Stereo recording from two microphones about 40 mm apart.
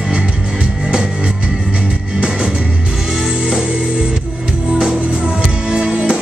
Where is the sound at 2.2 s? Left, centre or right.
Right.